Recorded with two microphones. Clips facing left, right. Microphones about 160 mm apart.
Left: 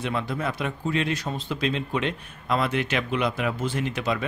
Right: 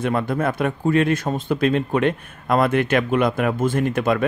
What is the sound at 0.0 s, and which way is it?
Speech, 50° right (ahead or behind).